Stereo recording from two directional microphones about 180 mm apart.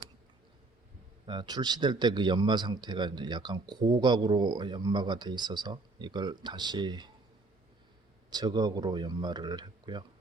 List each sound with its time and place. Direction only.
1.3 s a man's voice: 25° right (ahead or behind)
8.3 s a man's voice: 20° right (ahead or behind)